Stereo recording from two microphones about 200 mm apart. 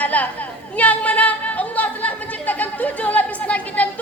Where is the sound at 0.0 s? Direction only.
10° left (ahead or behind).